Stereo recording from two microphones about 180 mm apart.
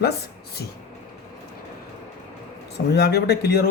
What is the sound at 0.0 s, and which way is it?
Speech, 65° left (ahead or behind).